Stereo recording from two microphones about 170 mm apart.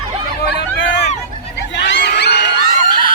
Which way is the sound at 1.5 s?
90° left.